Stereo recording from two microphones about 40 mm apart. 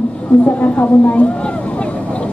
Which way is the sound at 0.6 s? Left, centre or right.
Left.